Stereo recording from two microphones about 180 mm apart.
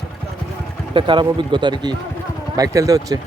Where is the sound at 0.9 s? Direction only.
25° right (ahead or behind).